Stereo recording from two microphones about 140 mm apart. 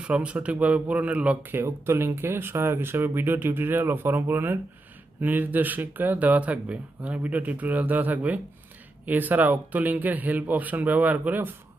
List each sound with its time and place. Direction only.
0.0 s speech: 10° right (ahead or behind)